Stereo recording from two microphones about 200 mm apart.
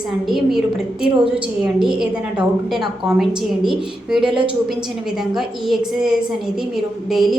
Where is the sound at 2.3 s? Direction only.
Centre (ahead or behind).